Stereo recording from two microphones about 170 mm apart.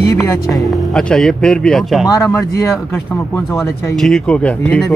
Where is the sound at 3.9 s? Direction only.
Centre (ahead or behind).